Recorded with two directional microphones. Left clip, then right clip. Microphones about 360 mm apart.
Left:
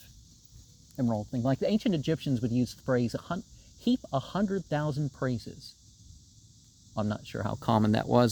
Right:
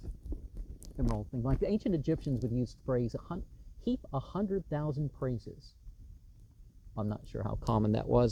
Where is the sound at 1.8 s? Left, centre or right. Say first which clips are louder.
Left 3 dB; centre.